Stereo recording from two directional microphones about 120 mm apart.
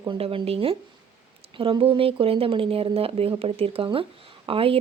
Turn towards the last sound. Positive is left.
turn(degrees=-50)  # may be behind; listen again after turning